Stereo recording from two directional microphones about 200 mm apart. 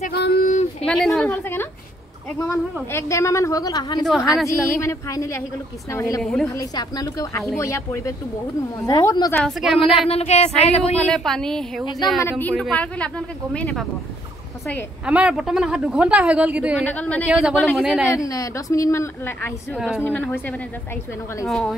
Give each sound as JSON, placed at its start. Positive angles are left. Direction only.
{"t": 0.0, "sound": "a sound", "side_deg": 55}
{"t": 0.8, "sound": "a woman's voice", "side_deg": 0}
{"t": 4.0, "sound": "a woman's voice", "side_deg": 0}
{"t": 4.7, "sound": "speech", "side_deg": 15}
{"t": 6.2, "sound": "a woman's voice", "side_deg": 0}
{"t": 6.7, "sound": "speech", "side_deg": 20}
{"t": 9.4, "sound": "a woman's voice", "side_deg": 0}
{"t": 9.8, "sound": "speech", "side_deg": 30}
{"t": 11.0, "sound": "a woman's voice", "side_deg": 5}
{"t": 15.0, "sound": "a woman's voice", "side_deg": -5}
{"t": 16.8, "sound": "speech", "side_deg": 5}
{"t": 17.3, "sound": "a woman's voice", "side_deg": -5}
{"t": 18.0, "sound": "speech", "side_deg": 15}
{"t": 21.5, "sound": "a woman's voice", "side_deg": 0}